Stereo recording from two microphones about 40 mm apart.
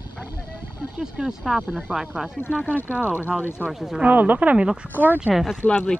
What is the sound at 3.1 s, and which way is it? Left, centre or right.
Speech, left.